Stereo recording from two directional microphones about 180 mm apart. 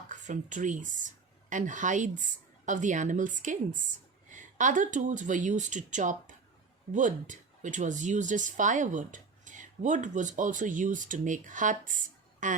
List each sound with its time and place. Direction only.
0.1 s a woman's voice: 45° right (ahead or behind)